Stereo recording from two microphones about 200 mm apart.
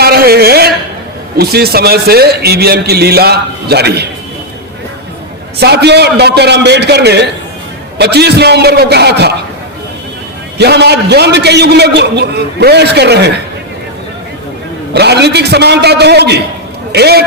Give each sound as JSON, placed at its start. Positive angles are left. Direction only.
{"t": 0.0, "sound": "a sound", "side_deg": -50}
{"t": 1.4, "sound": "a man's voice", "side_deg": -50}
{"t": 5.5, "sound": "a man's voice", "side_deg": -55}
{"t": 10.6, "sound": "a man's voice", "side_deg": -55}
{"t": 14.9, "sound": "a man's voice", "side_deg": -55}